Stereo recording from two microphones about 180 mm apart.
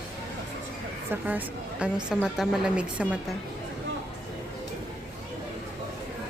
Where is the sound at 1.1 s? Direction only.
10° right (ahead or behind).